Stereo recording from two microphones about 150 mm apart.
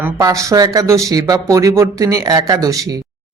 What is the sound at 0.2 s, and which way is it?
Speech, 20° right (ahead or behind).